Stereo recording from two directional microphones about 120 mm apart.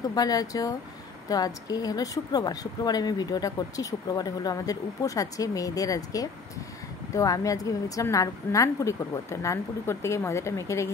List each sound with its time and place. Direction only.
0.1 s a woman's voice: 30° left (ahead or behind)